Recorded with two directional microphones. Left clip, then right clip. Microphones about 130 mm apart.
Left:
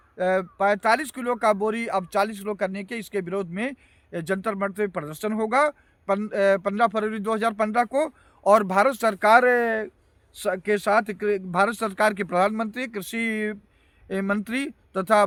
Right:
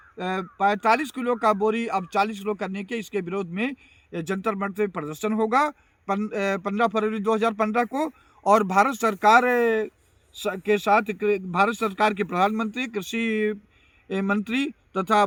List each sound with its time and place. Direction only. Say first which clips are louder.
0.2 s speech: left 3 dB; 40° left (ahead or behind)